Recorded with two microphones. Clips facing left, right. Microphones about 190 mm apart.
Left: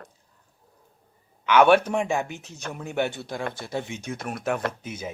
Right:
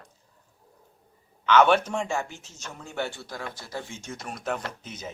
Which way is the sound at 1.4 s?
10° left (ahead or behind).